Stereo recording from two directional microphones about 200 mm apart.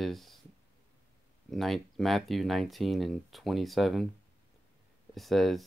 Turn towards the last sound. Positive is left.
turn(degrees=0)  # may be behind; listen again after turning